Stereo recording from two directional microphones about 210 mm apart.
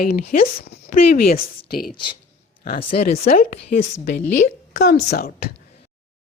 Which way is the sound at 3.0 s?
45° left (ahead or behind).